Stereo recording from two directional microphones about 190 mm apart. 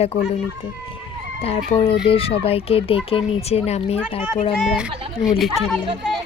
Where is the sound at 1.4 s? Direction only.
30° left (ahead or behind).